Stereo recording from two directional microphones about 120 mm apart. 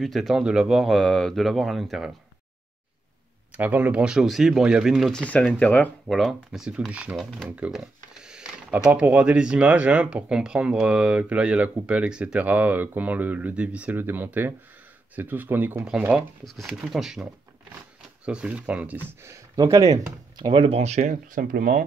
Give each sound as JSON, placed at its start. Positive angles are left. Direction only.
{"t": 0.0, "sound": "speech", "side_deg": 0}
{"t": 3.5, "sound": "speech", "side_deg": -15}
{"t": 5.2, "sound": "speech", "side_deg": 10}
{"t": 6.1, "sound": "speech", "side_deg": 0}
{"t": 7.2, "sound": "speech", "side_deg": 5}
{"t": 7.4, "sound": "speech", "side_deg": -10}
{"t": 16.2, "sound": "speech", "side_deg": 0}
{"t": 19.2, "sound": "speech", "side_deg": -25}
{"t": 20.3, "sound": "speech", "side_deg": -40}